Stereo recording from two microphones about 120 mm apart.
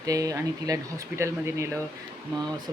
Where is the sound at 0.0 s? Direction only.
30° right (ahead or behind).